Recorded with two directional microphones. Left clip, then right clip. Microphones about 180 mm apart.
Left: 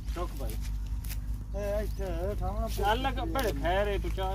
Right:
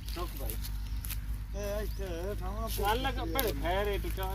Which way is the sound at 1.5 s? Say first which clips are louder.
Left 4 dB; 30° left (ahead or behind).